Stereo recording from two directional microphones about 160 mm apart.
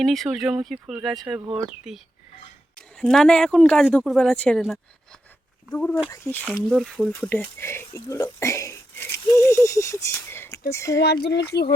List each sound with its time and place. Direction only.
0.0 s speech: centre (ahead or behind)
3.0 s speech: 5° left (ahead or behind)
10.9 s speech: 90° left